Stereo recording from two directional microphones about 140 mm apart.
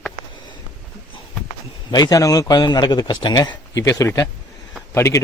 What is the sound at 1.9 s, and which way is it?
A man's voice, 25° left (ahead or behind).